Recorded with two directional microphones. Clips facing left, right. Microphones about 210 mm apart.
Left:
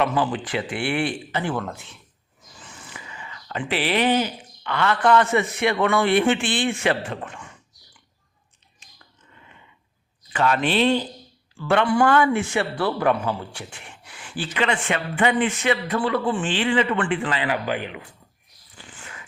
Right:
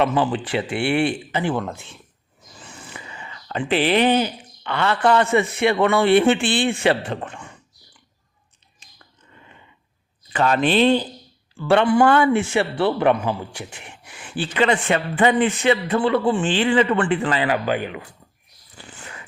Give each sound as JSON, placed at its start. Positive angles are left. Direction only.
{"t": 0.0, "sound": "a man's voice", "side_deg": -25}
{"t": 10.3, "sound": "a man's voice", "side_deg": -35}